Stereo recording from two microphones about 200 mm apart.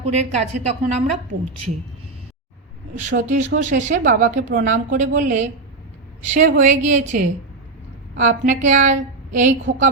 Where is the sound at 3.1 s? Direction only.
40° right (ahead or behind).